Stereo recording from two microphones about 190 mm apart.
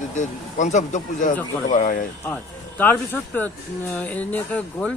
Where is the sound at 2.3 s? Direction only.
10° left (ahead or behind).